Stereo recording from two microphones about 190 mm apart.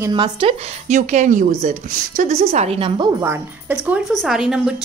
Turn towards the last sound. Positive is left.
turn(degrees=-5)  # may be behind; listen again after turning